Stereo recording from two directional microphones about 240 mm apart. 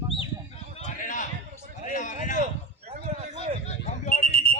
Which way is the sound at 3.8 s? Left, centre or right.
Left.